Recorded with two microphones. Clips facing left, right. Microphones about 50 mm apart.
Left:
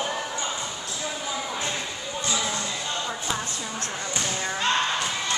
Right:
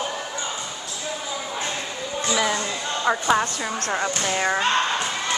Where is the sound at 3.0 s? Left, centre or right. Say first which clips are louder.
Right 10 dB; right.